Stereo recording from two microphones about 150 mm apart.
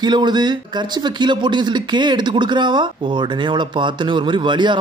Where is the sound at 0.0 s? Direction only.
30° right (ahead or behind).